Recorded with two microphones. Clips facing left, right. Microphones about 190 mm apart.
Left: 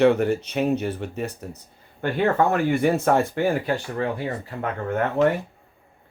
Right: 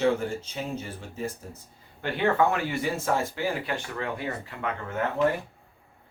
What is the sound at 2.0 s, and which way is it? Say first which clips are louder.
Speech: left 3 dB; 45° left (ahead or behind).